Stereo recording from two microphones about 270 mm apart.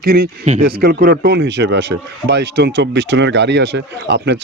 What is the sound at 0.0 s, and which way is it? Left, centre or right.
Speech, right.